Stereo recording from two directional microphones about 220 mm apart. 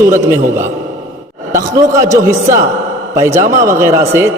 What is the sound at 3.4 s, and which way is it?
Speech, 35° right (ahead or behind).